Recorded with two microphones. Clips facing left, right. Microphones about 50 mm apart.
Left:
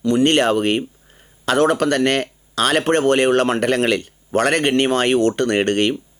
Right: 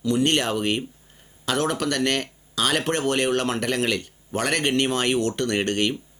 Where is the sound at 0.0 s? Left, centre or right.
Left.